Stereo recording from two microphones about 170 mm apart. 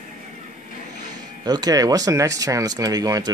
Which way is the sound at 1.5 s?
20° right (ahead or behind).